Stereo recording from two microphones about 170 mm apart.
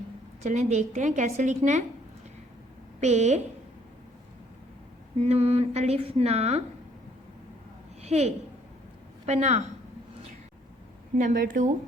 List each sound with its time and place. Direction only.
0.4 s a woman's voice: 45° right (ahead or behind)
3.0 s speech: 40° right (ahead or behind)
5.2 s speech: 35° right (ahead or behind)
8.0 s a woman's voice: 40° right (ahead or behind)
11.2 s a woman's voice: 50° right (ahead or behind)